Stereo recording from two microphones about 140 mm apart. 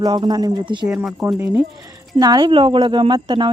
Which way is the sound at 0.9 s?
10° right (ahead or behind).